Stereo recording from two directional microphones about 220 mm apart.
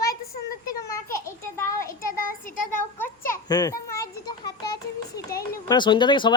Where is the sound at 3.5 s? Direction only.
15° left (ahead or behind).